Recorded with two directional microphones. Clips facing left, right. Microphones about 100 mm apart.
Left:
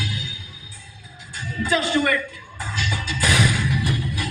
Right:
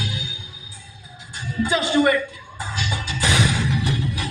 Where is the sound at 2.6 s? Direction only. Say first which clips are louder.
Even; 20° right (ahead or behind).